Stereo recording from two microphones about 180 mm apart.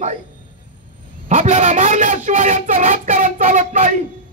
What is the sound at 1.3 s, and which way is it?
A man's voice, 45° right (ahead or behind).